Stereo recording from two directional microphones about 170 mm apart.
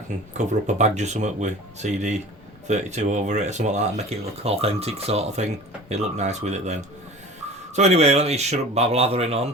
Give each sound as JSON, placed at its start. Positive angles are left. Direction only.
{"t": 0.3, "sound": "speech", "side_deg": -45}
{"t": 7.8, "sound": "speech", "side_deg": -40}